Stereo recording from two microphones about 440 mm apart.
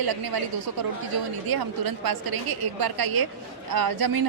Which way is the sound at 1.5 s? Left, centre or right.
Right.